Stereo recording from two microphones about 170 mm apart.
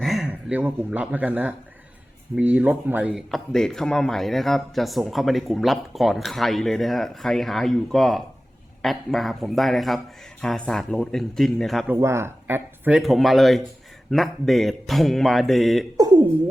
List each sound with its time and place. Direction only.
0.0 s speech: centre (ahead or behind)
11.9 s speech: 15° right (ahead or behind)
13.0 s speech: centre (ahead or behind)
16.0 s speech: 25° right (ahead or behind)